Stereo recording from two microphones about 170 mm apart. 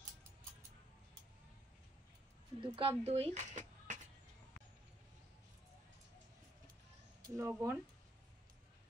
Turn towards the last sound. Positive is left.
turn(degrees=-15)  # may be behind; listen again after turning